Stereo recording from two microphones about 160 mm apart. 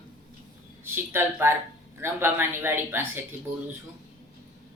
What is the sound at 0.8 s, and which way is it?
A man's voice, 15° right (ahead or behind).